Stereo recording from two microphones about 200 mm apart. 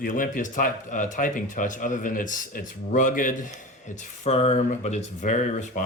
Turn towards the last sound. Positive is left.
turn(degrees=35)  # may be behind; listen again after turning